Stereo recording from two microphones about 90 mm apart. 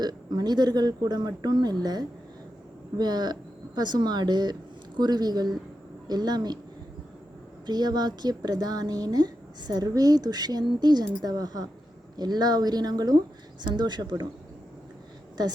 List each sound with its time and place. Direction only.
0.0 s speech: 50° right (ahead or behind)
7.7 s speech: 50° right (ahead or behind)
15.4 s speech: 50° right (ahead or behind)